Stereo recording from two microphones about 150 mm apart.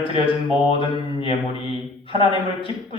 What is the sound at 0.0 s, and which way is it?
Speech, 35° left (ahead or behind).